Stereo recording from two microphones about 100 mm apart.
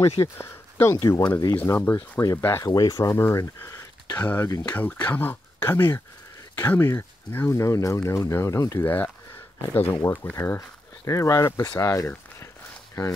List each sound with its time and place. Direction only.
0.2 s speech: 25° left (ahead or behind)
2.6 s speech: 40° left (ahead or behind)
3.2 s speech: 25° left (ahead or behind)
8.8 s speech: 20° left (ahead or behind)